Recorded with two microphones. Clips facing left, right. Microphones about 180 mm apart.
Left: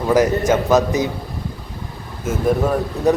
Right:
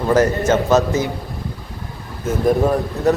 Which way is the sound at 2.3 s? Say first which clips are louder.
Right 2 dB; 5° left (ahead or behind).